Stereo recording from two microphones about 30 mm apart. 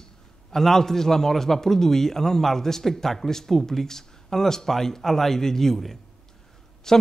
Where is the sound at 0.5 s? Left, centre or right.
Centre.